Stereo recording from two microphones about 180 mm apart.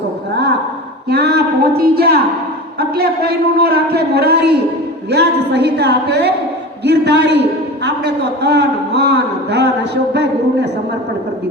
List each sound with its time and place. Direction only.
1.1 s a man's voice: 65° right (ahead or behind)